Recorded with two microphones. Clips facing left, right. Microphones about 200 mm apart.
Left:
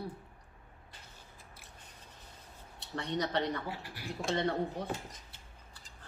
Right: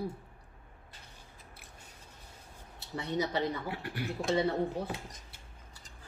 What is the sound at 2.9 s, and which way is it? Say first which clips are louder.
Speech: right 1 dB; 5° right (ahead or behind).